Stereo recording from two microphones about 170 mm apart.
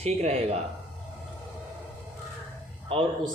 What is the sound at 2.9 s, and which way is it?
Speech, 30° right (ahead or behind).